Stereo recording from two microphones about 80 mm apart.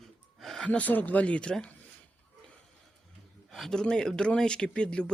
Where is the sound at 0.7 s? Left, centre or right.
Left.